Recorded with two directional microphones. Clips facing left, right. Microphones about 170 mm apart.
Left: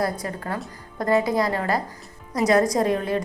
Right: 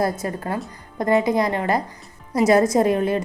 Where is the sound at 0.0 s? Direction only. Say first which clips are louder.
Right 3 dB; 25° right (ahead or behind).